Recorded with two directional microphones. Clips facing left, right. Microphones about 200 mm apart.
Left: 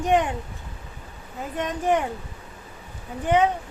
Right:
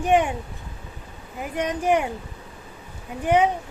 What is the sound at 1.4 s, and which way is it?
Speech, 15° right (ahead or behind).